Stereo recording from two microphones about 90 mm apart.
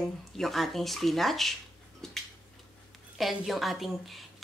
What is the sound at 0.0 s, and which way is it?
A woman's voice, centre (ahead or behind).